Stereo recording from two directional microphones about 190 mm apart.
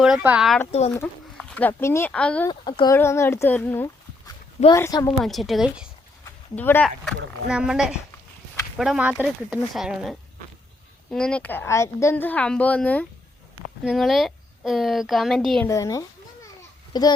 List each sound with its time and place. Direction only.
0.0 s a woman's voice: 5° right (ahead or behind)
0.9 s speech: 10° left (ahead or behind)
2.5 s a woman's voice: 25° left (ahead or behind)
5.2 s a woman's voice: centre (ahead or behind)
6.6 s a woman's voice: 10° left (ahead or behind)
15.6 s a woman's voice: 15° left (ahead or behind)